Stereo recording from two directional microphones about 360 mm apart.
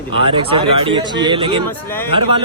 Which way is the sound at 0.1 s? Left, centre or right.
Centre.